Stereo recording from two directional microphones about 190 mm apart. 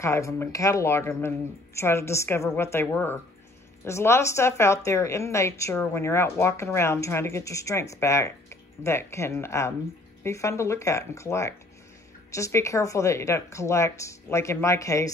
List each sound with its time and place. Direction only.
0.0 s a woman's voice: 15° left (ahead or behind)